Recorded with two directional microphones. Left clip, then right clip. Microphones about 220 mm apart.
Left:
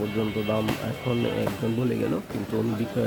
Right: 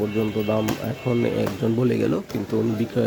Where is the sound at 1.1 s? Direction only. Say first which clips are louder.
Right 4 dB; 25° right (ahead or behind).